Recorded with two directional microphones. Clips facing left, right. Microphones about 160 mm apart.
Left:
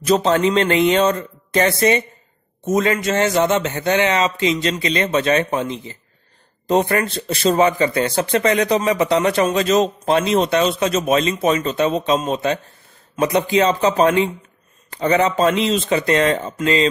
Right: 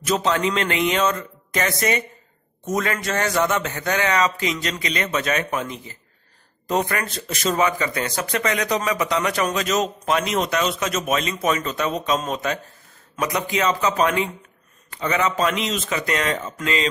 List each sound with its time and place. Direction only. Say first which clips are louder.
0.0 s a man's voice: left 5 dB; 35° left (ahead or behind)